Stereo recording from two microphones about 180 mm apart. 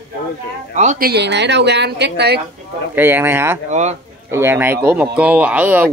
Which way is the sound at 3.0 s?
10° right (ahead or behind).